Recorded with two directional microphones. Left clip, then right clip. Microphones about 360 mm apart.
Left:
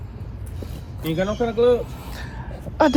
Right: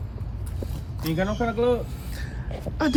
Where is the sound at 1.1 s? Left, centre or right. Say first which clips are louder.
Left 4 dB; right.